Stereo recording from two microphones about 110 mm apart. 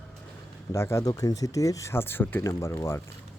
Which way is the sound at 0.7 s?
25° left (ahead or behind).